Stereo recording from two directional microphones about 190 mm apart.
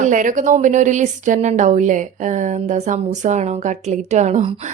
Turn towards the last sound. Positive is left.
turn(degrees=-40)  # may be behind; listen again after turning